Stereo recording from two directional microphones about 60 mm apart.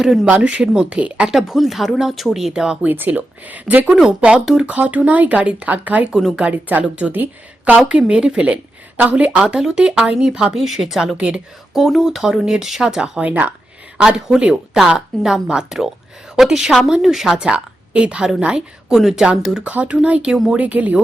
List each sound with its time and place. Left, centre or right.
0.0 s speech: centre
0.3 s speech: centre
1.3 s speech: centre
2.8 s speech: right
3.8 s speech: centre; by 6.1 s right
6.1 s speech: centre
6.4 s a woman's voice: right
7.9 s speech: centre
11.8 s a woman's voice: centre
17.3 s a woman's voice: centre
19.6 s speech: right